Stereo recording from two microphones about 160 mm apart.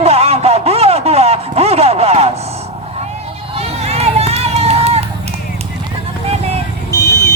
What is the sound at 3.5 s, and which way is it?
Run, 40° right (ahead or behind).